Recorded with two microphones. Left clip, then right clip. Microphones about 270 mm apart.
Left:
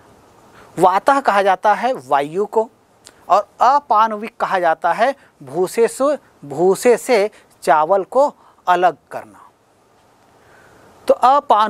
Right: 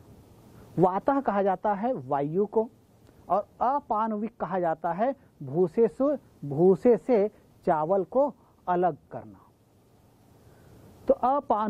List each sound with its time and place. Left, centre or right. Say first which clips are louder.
0.6 s a man's voice: left 11 dB; centre
2.4 s speech: left 9 dB; centre
3.3 s a man's voice: left 13 dB; centre
8.6 s a man's voice: left 11 dB; centre
11.1 s a man's voice: left 12 dB; centre